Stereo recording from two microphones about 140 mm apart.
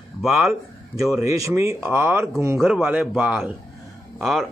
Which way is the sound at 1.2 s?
20° right (ahead or behind).